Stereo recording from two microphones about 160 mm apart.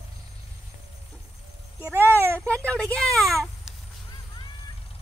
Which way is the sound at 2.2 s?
15° right (ahead or behind).